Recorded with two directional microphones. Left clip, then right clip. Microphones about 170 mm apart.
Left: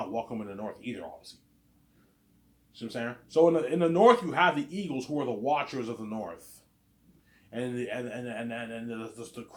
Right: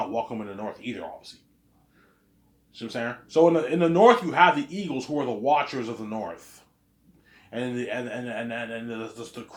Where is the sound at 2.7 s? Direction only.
25° right (ahead or behind).